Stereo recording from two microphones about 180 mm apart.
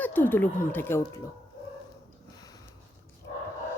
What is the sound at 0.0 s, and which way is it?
Speech, 10° left (ahead or behind).